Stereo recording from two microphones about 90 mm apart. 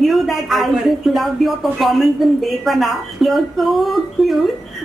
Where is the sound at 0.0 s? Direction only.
Centre (ahead or behind).